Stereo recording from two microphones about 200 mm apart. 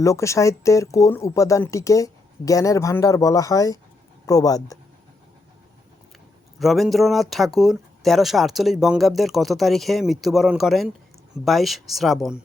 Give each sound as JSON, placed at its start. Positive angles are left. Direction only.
{"t": 0.0, "sound": "speech", "side_deg": 15}
{"t": 6.6, "sound": "speech", "side_deg": 0}